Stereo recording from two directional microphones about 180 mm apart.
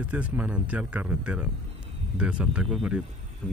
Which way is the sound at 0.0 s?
10° right (ahead or behind).